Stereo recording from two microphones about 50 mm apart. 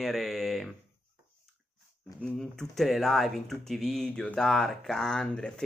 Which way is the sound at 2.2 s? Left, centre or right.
Centre.